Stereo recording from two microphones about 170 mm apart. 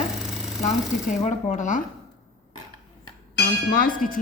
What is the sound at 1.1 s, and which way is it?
Speech, 45° left (ahead or behind).